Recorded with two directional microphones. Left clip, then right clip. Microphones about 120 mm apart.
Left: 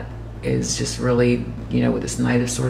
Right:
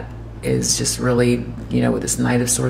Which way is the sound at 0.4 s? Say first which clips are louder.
Right 3 dB; 25° right (ahead or behind).